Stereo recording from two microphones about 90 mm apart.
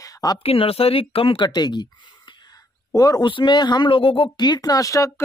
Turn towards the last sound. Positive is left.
turn(degrees=40)  # may be behind; listen again after turning